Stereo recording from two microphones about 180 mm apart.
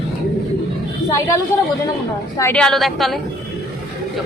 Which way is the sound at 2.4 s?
5° left (ahead or behind).